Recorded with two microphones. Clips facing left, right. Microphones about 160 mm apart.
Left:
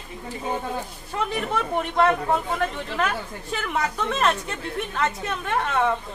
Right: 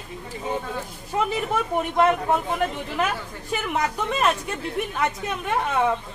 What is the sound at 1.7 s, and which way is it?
Speech, 10° right (ahead or behind).